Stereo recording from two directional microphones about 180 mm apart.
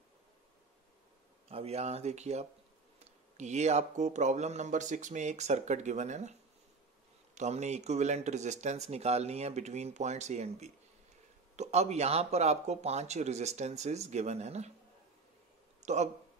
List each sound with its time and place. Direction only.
1.5 s speech: 35° right (ahead or behind)
7.3 s speech: 40° right (ahead or behind)
15.8 s speech: 40° right (ahead or behind)